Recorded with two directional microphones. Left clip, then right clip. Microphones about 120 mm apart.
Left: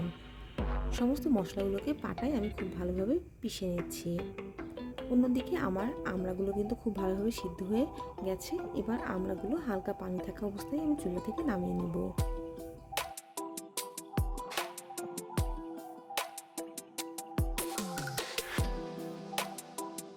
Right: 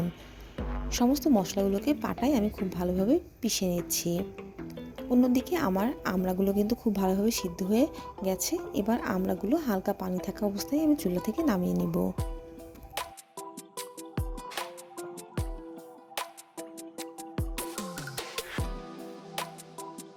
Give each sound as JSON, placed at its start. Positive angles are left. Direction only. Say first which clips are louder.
{"t": 0.9, "sound": "a woman's voice", "louder": "right 7 dB", "side_deg": -15}
{"t": 5.2, "sound": "a woman's voice", "louder": "right 6 dB", "side_deg": -15}
{"t": 13.0, "sound": "music", "louder": "right 1 dB", "side_deg": 0}
{"t": 14.2, "sound": "music", "louder": "even", "side_deg": 0}
{"t": 16.2, "sound": "music", "louder": "right 1 dB", "side_deg": 0}
{"t": 17.3, "sound": "music", "louder": "left 1 dB", "side_deg": 0}